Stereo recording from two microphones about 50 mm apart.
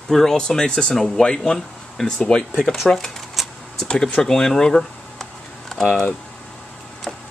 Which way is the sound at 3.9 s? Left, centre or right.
Centre.